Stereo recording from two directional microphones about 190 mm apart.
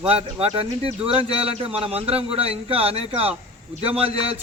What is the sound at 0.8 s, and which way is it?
A man's voice, 30° right (ahead or behind).